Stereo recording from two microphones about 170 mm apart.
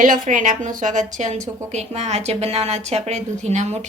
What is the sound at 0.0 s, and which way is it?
A woman's voice, 50° right (ahead or behind).